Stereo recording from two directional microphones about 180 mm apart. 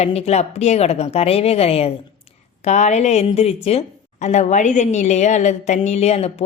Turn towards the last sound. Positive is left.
turn(degrees=35)  # may be behind; listen again after turning